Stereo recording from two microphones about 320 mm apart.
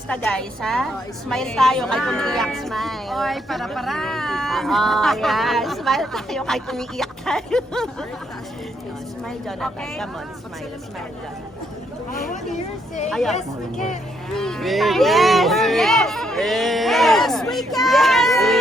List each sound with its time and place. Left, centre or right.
0.1 s speech: centre
9.5 s speech: centre
12.1 s speech: left
13.1 s speech: centre
14.3 s speech: centre